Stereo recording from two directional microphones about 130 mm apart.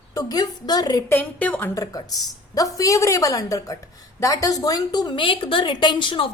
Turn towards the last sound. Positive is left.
turn(degrees=40)  # may be behind; listen again after turning